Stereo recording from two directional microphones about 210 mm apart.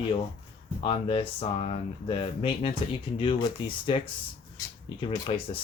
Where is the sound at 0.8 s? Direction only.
25° left (ahead or behind).